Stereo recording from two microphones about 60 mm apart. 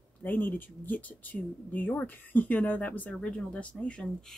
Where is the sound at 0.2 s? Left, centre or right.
Left.